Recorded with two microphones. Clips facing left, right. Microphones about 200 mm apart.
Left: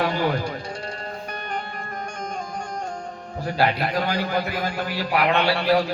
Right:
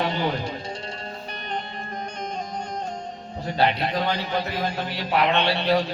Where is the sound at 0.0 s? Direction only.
25° right (ahead or behind).